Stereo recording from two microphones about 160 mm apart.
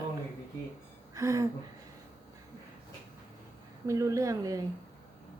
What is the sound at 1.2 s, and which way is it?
Speech, 20° right (ahead or behind).